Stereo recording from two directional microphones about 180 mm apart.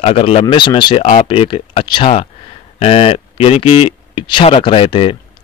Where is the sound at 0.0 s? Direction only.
35° left (ahead or behind).